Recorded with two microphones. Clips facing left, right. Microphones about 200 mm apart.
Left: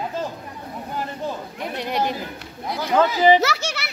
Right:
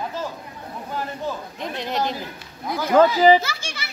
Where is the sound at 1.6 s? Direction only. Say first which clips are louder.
Left 1 dB; 10° left (ahead or behind).